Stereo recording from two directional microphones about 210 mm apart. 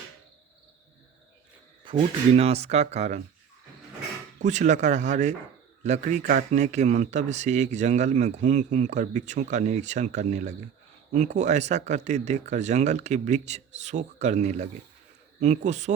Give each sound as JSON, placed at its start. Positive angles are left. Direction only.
{"t": 1.8, "sound": "speech", "side_deg": -25}
{"t": 4.4, "sound": "speech", "side_deg": -35}